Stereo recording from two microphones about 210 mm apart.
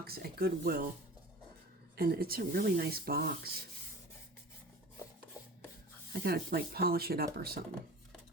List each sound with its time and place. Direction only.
0.0 s speech: 45° right (ahead or behind)
2.0 s speech: 45° right (ahead or behind)
6.2 s speech: 50° right (ahead or behind)